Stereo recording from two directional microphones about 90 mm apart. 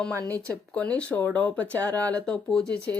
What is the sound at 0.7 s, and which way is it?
Speech, 15° left (ahead or behind).